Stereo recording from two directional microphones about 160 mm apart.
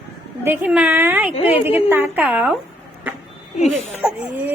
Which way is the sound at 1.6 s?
10° right (ahead or behind).